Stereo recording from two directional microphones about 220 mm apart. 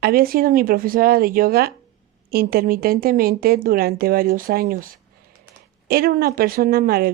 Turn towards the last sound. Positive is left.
turn(degrees=-45)  # may be behind; listen again after turning